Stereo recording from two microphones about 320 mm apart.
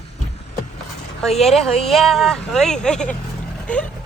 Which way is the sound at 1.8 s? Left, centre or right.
Centre.